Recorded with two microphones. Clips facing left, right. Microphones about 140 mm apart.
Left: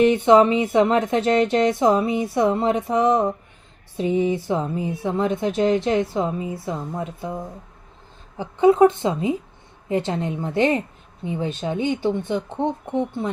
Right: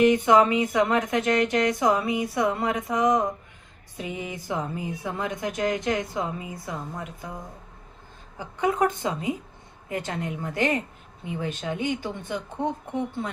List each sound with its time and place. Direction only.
0.0 s speech: 25° left (ahead or behind)
8.4 s speech: 25° left (ahead or behind)